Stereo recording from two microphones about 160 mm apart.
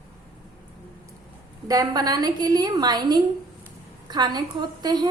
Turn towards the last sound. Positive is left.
turn(degrees=-25)  # may be behind; listen again after turning